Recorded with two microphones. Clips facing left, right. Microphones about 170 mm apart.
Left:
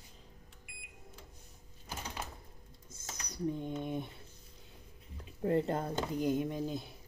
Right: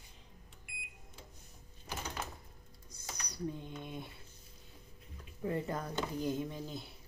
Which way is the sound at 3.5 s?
20° left (ahead or behind).